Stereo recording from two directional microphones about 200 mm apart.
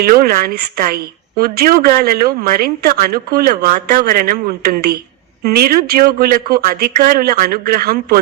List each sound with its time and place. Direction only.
0.0 s a woman's voice: 50° right (ahead or behind)